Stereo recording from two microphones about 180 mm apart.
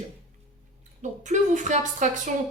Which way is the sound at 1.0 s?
45° right (ahead or behind).